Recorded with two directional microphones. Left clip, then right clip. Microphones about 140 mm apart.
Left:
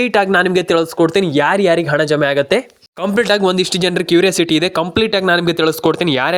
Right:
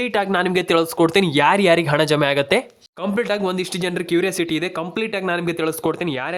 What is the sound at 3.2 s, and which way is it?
Speech, 30° left (ahead or behind).